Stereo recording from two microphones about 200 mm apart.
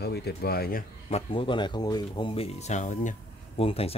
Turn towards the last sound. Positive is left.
turn(degrees=30)  # may be behind; listen again after turning